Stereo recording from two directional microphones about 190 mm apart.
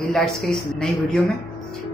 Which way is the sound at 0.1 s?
Centre (ahead or behind).